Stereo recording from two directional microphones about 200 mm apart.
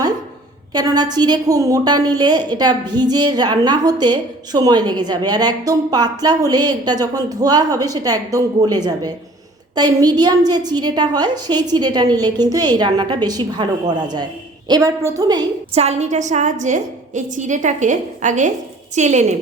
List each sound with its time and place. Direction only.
0.7 s a woman's voice: 20° right (ahead or behind)
15.8 s a woman's voice: 35° right (ahead or behind)